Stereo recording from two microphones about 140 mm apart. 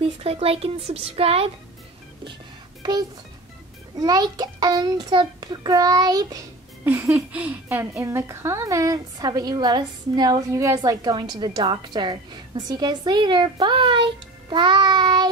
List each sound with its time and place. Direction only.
0.2 s a woman's voice: 45° right (ahead or behind)
2.8 s a child's voice: 30° right (ahead or behind)
6.8 s a sound: 20° right (ahead or behind)
7.2 s a woman's voice: 10° right (ahead or behind); by 15.2 s 30° right (ahead or behind)